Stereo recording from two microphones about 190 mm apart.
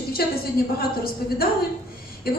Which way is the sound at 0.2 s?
55° left (ahead or behind).